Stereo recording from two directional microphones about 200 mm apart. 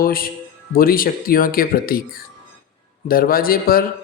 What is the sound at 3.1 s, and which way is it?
Speech, 45° left (ahead or behind).